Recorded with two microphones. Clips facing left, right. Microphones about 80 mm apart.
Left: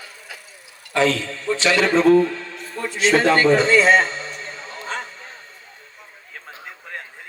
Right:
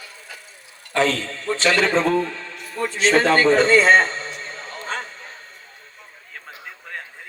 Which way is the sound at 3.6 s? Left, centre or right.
Right.